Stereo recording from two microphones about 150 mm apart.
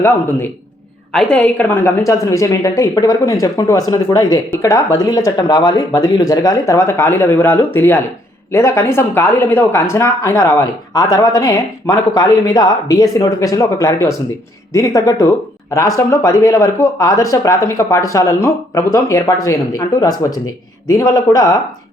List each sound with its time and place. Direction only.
1.1 s speech: 5° left (ahead or behind); by 21.5 s 25° left (ahead or behind)